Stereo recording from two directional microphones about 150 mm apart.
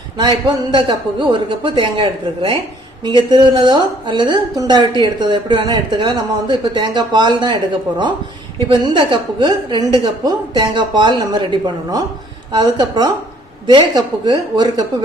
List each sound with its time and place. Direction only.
0.2 s a woman's voice: 30° right (ahead or behind)